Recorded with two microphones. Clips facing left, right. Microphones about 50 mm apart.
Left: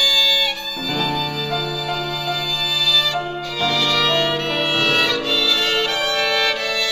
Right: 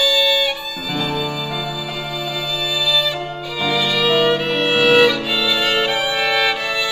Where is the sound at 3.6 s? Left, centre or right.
Centre.